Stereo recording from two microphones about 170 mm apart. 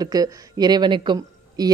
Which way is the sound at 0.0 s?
20° right (ahead or behind).